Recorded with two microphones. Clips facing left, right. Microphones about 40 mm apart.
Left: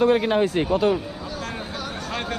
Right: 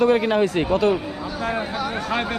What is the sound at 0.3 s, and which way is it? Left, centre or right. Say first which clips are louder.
Speech: right 1 dB; right.